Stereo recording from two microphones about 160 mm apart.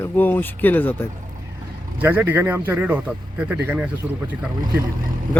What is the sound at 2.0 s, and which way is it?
A man's voice, 10° right (ahead or behind).